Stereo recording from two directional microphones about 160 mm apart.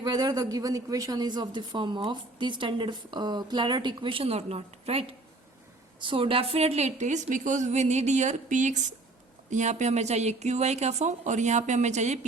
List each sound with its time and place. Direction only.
0.0 s a woman's voice: 25° right (ahead or behind); by 12.2 s 45° right (ahead or behind)